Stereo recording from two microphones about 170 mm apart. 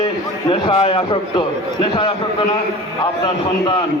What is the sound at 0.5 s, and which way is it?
A man's voice, 30° left (ahead or behind).